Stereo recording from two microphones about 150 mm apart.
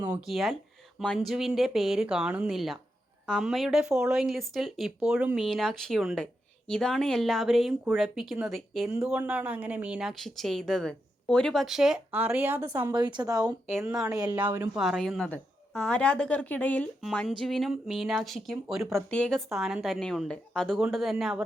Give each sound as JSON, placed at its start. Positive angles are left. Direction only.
{"t": 0.2, "sound": "speech", "side_deg": 0}
{"t": 12.9, "sound": "a woman's voice", "side_deg": -30}
{"t": 13.7, "sound": "speech", "side_deg": 0}
{"t": 14.1, "sound": "a woman's voice", "side_deg": -25}
{"t": 14.3, "sound": "speech", "side_deg": -15}
{"t": 14.8, "sound": "a woman's voice", "side_deg": 0}
{"t": 17.0, "sound": "speech", "side_deg": 0}